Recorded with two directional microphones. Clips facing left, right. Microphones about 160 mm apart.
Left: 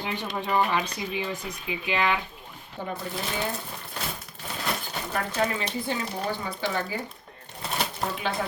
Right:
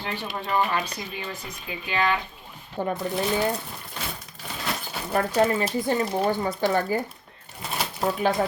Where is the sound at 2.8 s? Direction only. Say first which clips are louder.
Right 7 dB; 55° right (ahead or behind).